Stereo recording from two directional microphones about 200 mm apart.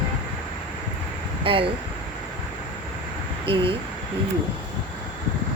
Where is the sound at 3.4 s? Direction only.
25° right (ahead or behind).